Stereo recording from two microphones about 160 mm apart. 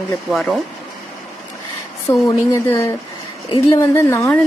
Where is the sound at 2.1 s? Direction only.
20° left (ahead or behind).